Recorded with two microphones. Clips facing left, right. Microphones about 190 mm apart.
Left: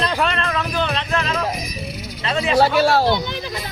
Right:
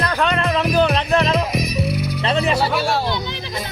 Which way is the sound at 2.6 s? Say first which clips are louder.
Left 5 dB; 45° left (ahead or behind).